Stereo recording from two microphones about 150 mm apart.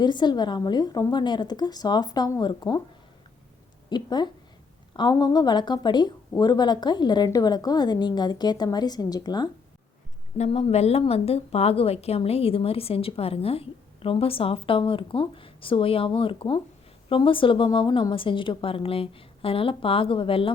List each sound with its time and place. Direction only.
0.0 s a woman's voice: 30° left (ahead or behind)
3.8 s a woman's voice: 30° left (ahead or behind)
10.3 s speech: 45° left (ahead or behind)